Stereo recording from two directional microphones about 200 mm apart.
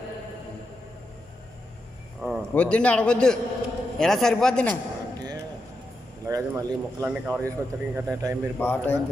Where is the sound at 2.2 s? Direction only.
5° left (ahead or behind).